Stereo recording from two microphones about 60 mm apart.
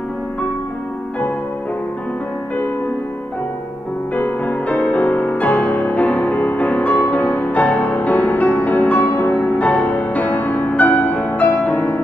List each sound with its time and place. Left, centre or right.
4.1 s music: left